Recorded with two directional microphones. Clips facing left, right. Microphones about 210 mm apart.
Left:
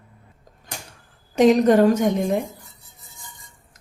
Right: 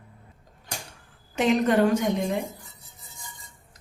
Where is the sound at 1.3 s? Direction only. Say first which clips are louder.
Left 7 dB; 40° left (ahead or behind).